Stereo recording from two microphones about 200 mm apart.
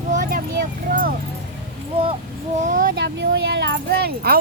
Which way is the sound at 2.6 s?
40° right (ahead or behind).